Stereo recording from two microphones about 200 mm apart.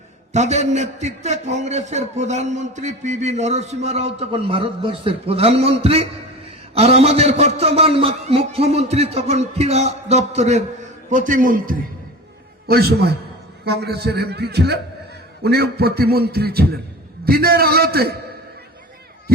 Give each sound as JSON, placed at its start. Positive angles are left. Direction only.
{"t": 0.3, "sound": "a man's voice", "side_deg": -35}